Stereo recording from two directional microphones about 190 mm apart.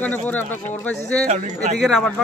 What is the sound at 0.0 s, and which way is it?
Speech, 10° left (ahead or behind).